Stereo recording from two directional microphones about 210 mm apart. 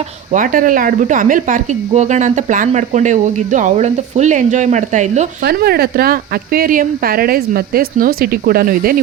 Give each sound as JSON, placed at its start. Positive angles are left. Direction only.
{"t": 0.3, "sound": "speech", "side_deg": -40}
{"t": 5.4, "sound": "speech", "side_deg": -50}